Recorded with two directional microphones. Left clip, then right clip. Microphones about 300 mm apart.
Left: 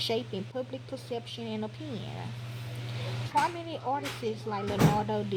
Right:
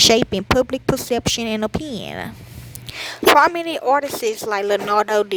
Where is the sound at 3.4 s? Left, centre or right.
Right.